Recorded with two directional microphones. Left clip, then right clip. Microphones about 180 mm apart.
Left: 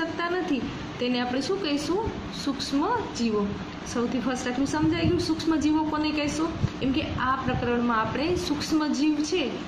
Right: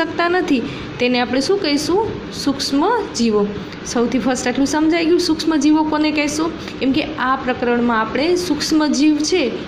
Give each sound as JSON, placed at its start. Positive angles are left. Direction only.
{"t": 0.2, "sound": "a woman's voice", "side_deg": -40}